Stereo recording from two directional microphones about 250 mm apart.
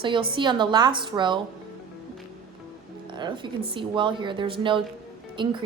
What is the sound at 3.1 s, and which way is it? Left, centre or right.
A woman's voice, centre.